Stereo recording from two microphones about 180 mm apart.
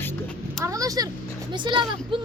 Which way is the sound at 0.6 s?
20° right (ahead or behind).